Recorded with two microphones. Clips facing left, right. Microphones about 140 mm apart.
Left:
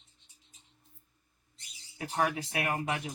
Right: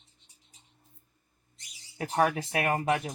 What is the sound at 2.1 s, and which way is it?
Speech, 35° right (ahead or behind).